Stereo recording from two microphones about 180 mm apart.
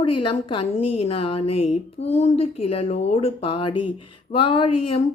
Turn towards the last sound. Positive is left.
turn(degrees=30)  # may be behind; listen again after turning